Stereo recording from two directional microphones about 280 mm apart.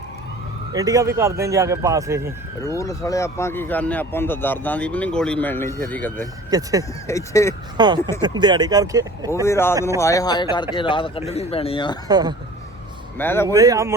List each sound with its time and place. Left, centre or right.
0.7 s speech: centre
2.6 s speech: centre
6.5 s speech: centre
7.1 s speech: centre
7.8 s speech: centre
9.3 s speech: centre
12.0 s speech: centre
13.1 s speech: centre
13.5 s speech: centre